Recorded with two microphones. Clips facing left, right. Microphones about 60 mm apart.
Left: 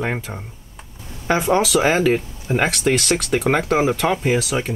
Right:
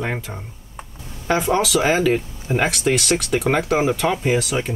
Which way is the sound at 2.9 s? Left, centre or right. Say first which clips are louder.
Left 1 dB; centre.